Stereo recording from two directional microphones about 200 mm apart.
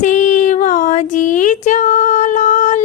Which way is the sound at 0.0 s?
40° left (ahead or behind).